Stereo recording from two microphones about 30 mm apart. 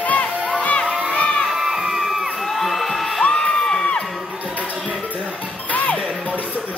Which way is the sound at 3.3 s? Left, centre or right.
Left.